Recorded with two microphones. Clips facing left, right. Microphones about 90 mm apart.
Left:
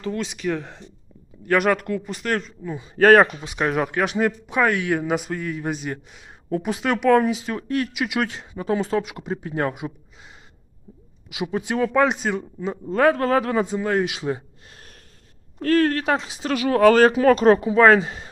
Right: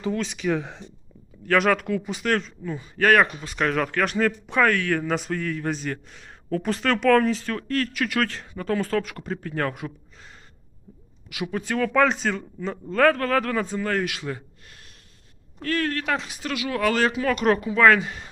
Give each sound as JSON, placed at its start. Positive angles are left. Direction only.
{"t": 0.1, "sound": "speech", "side_deg": 0}
{"t": 3.0, "sound": "speech", "side_deg": 30}
{"t": 3.4, "sound": "speech", "side_deg": 15}
{"t": 11.3, "sound": "a man's voice", "side_deg": 20}
{"t": 15.6, "sound": "speech", "side_deg": 35}
{"t": 16.5, "sound": "speech", "side_deg": 40}